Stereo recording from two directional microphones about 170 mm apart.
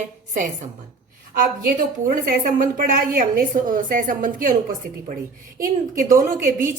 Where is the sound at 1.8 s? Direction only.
55° right (ahead or behind).